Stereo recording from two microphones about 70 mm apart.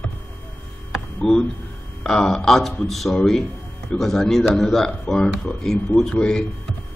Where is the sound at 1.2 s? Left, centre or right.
Centre.